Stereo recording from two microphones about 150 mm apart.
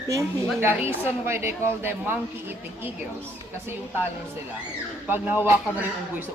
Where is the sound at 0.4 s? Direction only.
10° right (ahead or behind).